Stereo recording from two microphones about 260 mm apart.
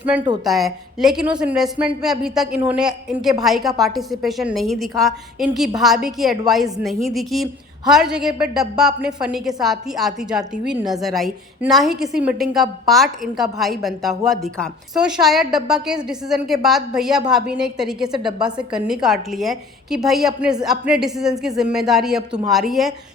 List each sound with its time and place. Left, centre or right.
0.0 s a woman's voice: centre
18.1 s a woman's voice: centre
18.3 s a woman's voice: centre